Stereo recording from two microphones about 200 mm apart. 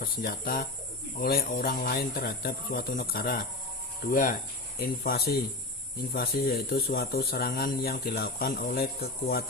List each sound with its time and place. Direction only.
0.0 s speech: 50° left (ahead or behind)